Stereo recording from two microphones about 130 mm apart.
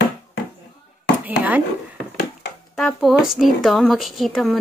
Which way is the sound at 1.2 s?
10° right (ahead or behind).